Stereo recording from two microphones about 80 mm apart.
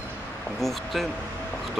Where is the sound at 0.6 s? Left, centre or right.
Centre.